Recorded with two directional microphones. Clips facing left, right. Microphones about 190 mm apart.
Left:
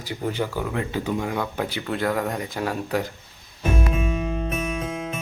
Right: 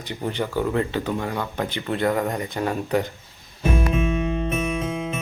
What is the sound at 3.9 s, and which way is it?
Music, 5° left (ahead or behind).